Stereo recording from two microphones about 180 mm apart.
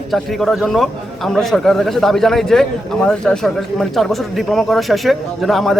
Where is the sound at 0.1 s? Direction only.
Centre (ahead or behind).